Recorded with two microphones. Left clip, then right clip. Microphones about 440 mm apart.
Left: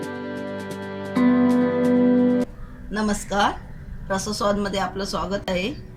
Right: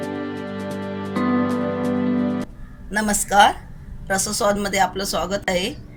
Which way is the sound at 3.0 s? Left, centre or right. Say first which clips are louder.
Right 7 dB; centre.